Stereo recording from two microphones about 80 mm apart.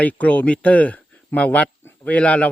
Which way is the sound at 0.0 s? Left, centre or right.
Centre.